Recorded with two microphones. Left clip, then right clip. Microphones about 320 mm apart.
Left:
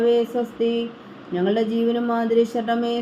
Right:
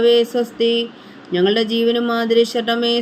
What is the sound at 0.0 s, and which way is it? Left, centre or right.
Speech, right.